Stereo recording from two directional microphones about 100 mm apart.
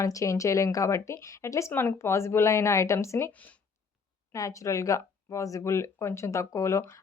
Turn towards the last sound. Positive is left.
turn(degrees=30)  # may be behind; listen again after turning